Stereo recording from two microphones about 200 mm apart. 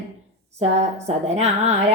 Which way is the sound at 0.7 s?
35° right (ahead or behind).